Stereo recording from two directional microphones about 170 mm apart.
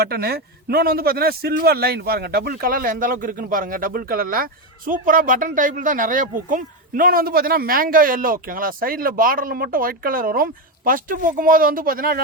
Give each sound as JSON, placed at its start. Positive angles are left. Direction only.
{"t": 0.0, "sound": "a man's voice", "side_deg": -65}